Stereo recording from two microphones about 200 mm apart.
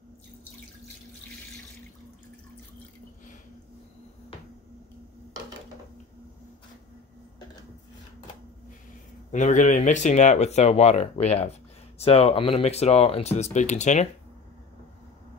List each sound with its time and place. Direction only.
9.3 s speech: 40° left (ahead or behind)